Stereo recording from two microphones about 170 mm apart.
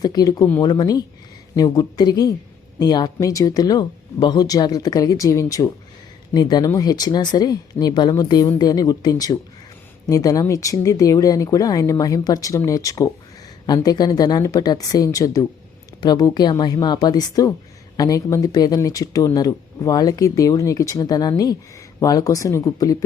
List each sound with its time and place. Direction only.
0.0 s speech: 20° left (ahead or behind)